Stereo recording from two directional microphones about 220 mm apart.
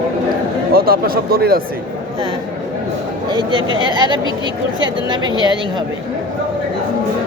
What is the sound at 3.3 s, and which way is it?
Speech, 20° right (ahead or behind).